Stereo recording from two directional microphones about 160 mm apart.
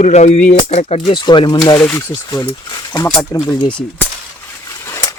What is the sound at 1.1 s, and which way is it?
Speech, 30° left (ahead or behind).